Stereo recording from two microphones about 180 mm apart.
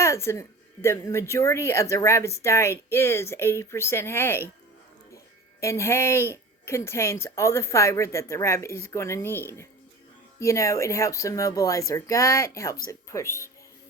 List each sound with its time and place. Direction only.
0.0 s a woman's voice: 15° left (ahead or behind)